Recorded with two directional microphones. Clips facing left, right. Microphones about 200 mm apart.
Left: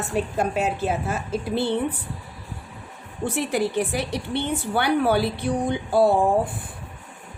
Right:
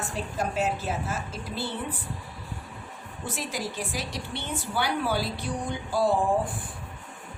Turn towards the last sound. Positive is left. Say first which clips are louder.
# left 5 dB
turn(degrees=60)  # may be behind; listen again after turning